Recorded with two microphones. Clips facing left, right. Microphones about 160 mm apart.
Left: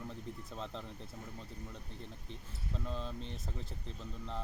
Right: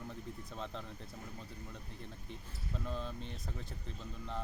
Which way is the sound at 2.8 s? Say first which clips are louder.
Even; centre (ahead or behind).